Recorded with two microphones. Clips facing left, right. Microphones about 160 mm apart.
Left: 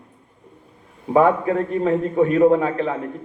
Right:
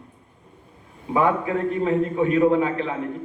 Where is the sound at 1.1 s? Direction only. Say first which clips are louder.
Left 5 dB; 40° left (ahead or behind).